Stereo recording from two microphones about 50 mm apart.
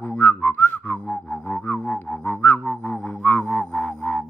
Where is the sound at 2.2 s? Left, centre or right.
Left.